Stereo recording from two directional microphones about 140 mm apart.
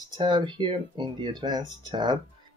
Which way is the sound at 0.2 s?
30° right (ahead or behind).